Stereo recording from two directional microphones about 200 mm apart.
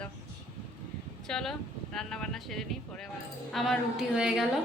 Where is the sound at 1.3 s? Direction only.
Centre (ahead or behind).